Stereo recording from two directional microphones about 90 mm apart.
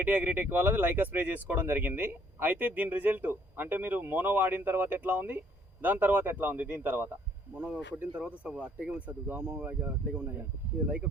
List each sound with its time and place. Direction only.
0.0 s speech: 20° right (ahead or behind)